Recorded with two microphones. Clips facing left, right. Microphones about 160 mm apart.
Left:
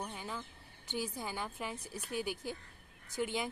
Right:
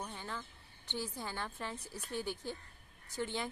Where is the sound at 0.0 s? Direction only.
10° left (ahead or behind).